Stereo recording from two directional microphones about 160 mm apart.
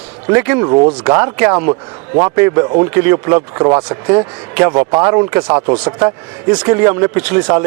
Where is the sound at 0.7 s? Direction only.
35° right (ahead or behind).